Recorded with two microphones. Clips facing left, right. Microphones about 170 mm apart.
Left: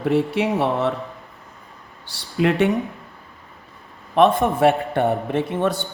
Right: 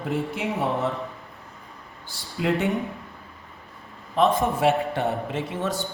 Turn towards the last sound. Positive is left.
turn(degrees=65)  # may be behind; listen again after turning